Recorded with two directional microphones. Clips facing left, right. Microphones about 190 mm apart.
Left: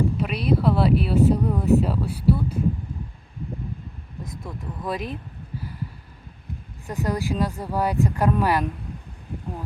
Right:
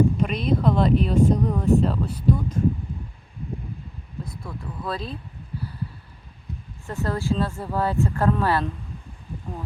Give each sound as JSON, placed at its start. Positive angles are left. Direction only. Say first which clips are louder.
{"t": 0.2, "sound": "speech", "louder": "even", "side_deg": 5}
{"t": 4.2, "sound": "vehicle", "louder": "right 1 dB", "side_deg": 15}
{"t": 4.8, "sound": "speech", "louder": "left 2 dB", "side_deg": 15}
{"t": 6.8, "sound": "speech", "louder": "even", "side_deg": 15}